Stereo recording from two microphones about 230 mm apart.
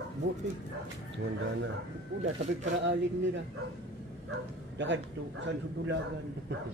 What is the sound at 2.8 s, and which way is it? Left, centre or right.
Speech, right.